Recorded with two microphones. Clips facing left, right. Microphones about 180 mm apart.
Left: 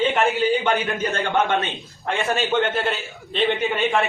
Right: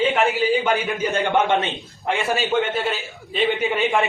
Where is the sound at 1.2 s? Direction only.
20° right (ahead or behind).